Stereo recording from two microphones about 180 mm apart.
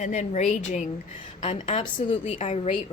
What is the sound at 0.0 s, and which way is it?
A woman's voice, 40° left (ahead or behind).